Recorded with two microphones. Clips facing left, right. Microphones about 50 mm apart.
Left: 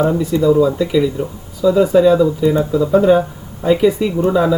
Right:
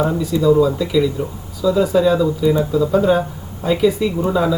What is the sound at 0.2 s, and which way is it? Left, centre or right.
Speech, left.